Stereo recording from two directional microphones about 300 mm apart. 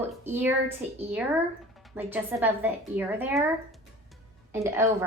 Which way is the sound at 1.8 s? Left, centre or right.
Centre.